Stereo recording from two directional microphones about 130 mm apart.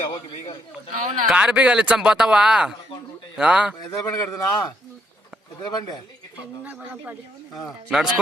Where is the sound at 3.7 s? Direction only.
30° left (ahead or behind).